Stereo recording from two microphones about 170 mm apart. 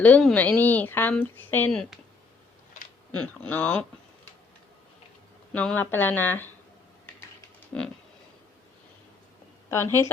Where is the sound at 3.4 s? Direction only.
5° left (ahead or behind).